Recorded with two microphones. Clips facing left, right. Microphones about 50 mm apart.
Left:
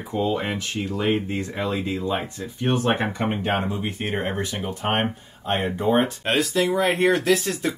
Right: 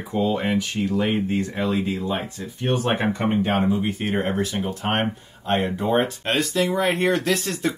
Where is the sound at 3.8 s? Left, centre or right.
Centre.